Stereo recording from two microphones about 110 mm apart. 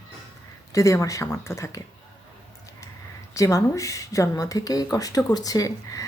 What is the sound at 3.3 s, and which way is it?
Speech, 30° left (ahead or behind).